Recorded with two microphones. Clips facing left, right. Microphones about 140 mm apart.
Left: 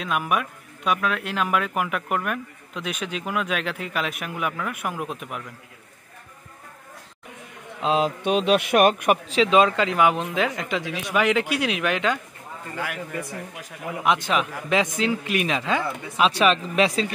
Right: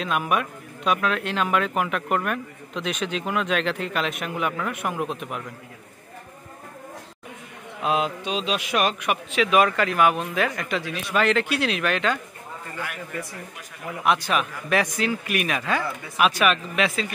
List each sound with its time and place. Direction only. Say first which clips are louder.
0.0 s speech: right 1 dB; 5° left (ahead or behind)
7.8 s a man's voice: left 2 dB; 30° left (ahead or behind)
8.2 s a man's voice: left 7 dB; 55° left (ahead or behind)
9.3 s speech: even; 25° left (ahead or behind)
13.8 s a man's voice: even; 20° left (ahead or behind)
16.3 s speech: left 2 dB; 30° left (ahead or behind)